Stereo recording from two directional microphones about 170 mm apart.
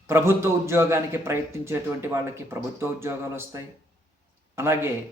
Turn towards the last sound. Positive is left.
turn(degrees=-15)  # may be behind; listen again after turning